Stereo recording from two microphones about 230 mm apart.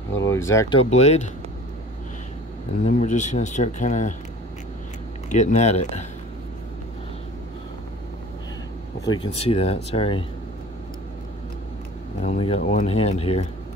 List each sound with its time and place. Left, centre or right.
0.2 s speech: centre
0.7 s speech: left
2.8 s speech: left
5.3 s speech: left
9.0 s speech: centre
12.2 s speech: left